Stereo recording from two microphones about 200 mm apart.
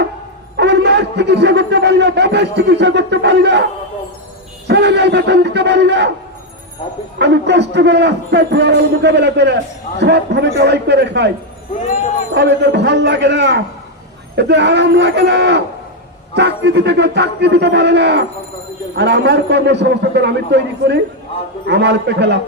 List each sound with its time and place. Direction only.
0.5 s a man's voice: 60° right (ahead or behind)
4.7 s a man's voice: 60° right (ahead or behind)
7.2 s a man's voice: 60° right (ahead or behind)
12.3 s a man's voice: 60° right (ahead or behind)